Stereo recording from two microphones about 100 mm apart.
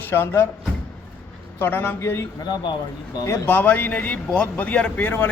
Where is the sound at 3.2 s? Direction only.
30° left (ahead or behind).